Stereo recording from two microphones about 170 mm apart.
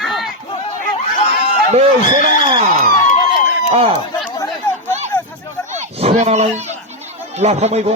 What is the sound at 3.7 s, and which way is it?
Speech, 35° right (ahead or behind).